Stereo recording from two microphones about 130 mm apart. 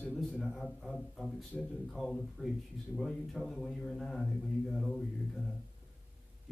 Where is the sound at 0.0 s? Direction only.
5° left (ahead or behind).